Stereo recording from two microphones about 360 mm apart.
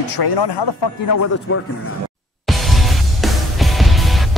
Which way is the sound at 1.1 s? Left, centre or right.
Left.